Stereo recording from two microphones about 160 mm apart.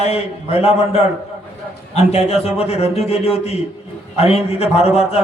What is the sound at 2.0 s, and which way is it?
Mantra, 40° left (ahead or behind).